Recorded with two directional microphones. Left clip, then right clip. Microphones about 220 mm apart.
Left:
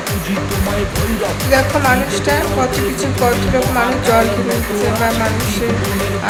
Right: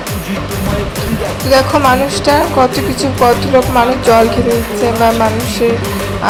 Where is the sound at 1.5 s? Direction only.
20° right (ahead or behind).